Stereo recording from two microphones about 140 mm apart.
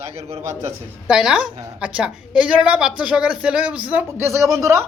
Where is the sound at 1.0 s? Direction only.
5° right (ahead or behind); by 4.8 s 20° right (ahead or behind).